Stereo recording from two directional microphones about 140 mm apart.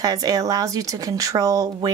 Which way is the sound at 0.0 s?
25° right (ahead or behind).